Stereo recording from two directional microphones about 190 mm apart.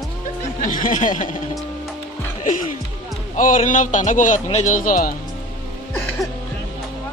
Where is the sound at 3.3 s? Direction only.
40° left (ahead or behind).